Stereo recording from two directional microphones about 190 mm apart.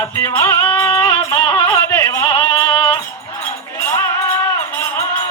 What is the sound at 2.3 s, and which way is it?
Music, 30° left (ahead or behind).